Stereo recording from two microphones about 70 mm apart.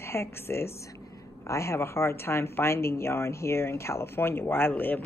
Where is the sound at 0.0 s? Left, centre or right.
Left.